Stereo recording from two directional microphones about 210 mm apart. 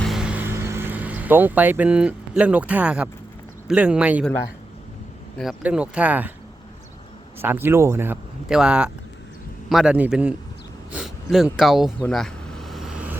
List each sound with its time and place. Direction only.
0.0 s insect: centre (ahead or behind)
3.7 s speech: 5° right (ahead or behind)
5.4 s speech: 5° right (ahead or behind)
7.4 s a man's voice: 10° right (ahead or behind)
10.9 s vehicle: centre (ahead or behind)